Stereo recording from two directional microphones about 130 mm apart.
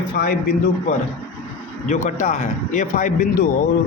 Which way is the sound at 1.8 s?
70° left (ahead or behind).